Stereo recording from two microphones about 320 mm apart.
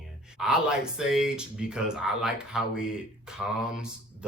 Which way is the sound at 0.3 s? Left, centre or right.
Centre.